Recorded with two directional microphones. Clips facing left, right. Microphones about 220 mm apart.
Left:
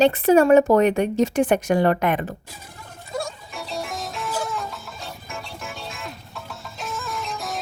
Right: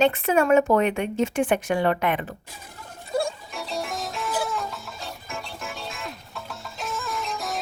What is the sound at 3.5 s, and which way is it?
Music, centre (ahead or behind).